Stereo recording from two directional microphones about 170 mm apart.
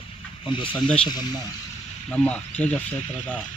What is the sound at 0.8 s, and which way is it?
Speech, 5° left (ahead or behind).